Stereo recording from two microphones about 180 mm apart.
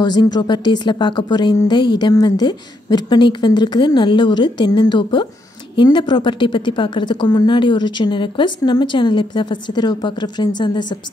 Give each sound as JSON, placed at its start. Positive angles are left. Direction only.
{"t": 0.0, "sound": "a woman's voice", "side_deg": 25}